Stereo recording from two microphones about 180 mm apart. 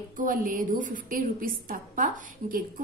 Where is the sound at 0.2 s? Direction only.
50° right (ahead or behind).